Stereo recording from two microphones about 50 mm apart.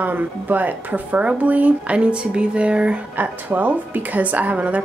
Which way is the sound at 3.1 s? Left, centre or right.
Right.